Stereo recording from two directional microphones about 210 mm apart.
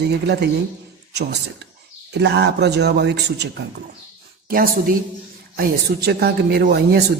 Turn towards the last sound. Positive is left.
turn(degrees=-50)  # may be behind; listen again after turning